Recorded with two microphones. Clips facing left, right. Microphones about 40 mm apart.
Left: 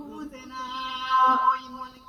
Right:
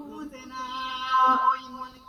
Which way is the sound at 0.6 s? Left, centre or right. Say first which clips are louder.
Even; centre.